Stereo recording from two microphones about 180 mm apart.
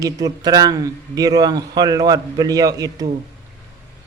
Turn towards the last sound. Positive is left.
turn(degrees=-20)  # may be behind; listen again after turning